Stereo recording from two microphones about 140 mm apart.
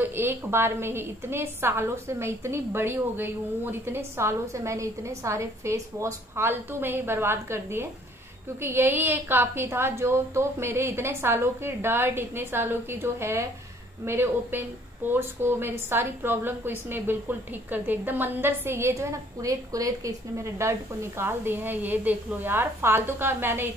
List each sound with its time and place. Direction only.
0.0 s a woman's voice: 15° right (ahead or behind)